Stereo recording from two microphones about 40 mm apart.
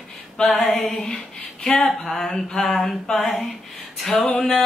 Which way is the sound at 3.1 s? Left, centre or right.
Centre.